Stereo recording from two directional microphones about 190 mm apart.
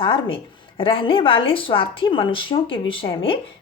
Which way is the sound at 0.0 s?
25° left (ahead or behind).